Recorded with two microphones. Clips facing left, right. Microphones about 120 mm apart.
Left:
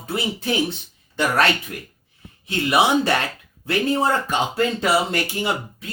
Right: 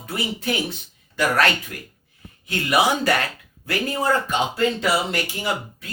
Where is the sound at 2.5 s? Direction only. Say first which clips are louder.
Left 2 dB; 25° left (ahead or behind).